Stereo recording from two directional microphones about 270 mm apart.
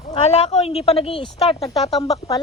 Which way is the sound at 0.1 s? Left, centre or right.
Centre.